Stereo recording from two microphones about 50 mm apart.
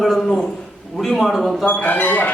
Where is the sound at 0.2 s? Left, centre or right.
Centre.